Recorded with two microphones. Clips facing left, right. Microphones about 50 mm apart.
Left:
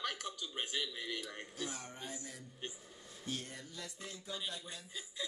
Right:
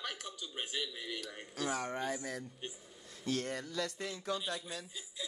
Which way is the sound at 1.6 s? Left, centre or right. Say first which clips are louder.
Right 10 dB; right.